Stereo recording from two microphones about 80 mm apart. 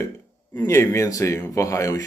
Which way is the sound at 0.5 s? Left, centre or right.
Left.